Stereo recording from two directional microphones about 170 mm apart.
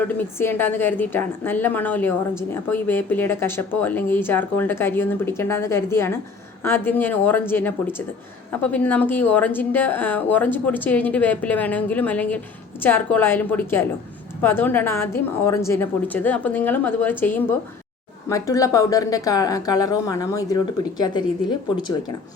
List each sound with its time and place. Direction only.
0.2 s a woman's voice: 15° left (ahead or behind)